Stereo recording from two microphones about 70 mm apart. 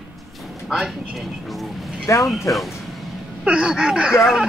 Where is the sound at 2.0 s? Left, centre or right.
Left.